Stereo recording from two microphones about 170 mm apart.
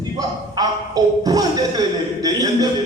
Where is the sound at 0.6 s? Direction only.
20° right (ahead or behind).